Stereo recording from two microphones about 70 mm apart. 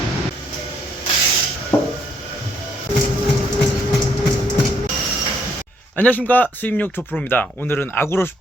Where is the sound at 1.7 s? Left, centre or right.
Left.